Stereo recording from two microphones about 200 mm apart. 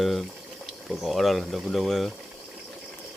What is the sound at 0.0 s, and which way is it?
Speech, centre (ahead or behind).